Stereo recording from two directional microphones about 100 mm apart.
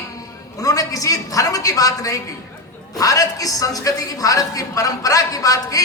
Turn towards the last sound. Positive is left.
turn(degrees=35)  # may be behind; listen again after turning